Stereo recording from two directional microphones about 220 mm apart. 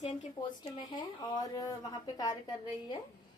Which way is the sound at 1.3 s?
15° left (ahead or behind).